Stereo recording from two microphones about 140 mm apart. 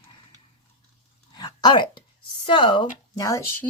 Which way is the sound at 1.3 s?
30° left (ahead or behind).